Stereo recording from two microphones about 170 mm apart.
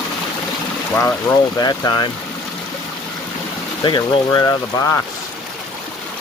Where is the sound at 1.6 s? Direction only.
25° left (ahead or behind).